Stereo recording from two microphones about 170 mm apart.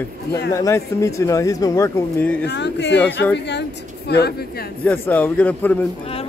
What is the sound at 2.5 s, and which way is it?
A woman's voice, 90° left.